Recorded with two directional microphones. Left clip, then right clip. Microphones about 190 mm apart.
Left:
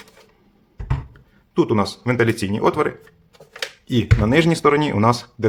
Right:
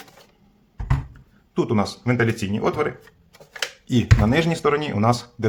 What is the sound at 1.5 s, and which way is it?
Speech, 20° left (ahead or behind).